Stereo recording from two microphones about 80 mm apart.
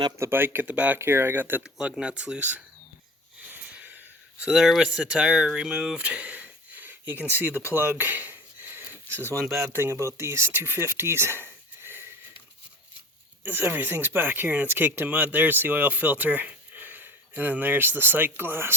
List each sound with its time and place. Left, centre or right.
0.2 s speech: right
0.9 s speech: right
1.6 s speech: centre
3.5 s a sound: centre
4.5 s speech: centre; by 12.0 s right
13.4 s speech: right